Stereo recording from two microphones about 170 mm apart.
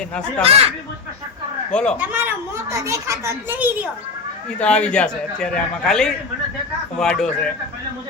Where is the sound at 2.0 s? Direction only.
10° right (ahead or behind).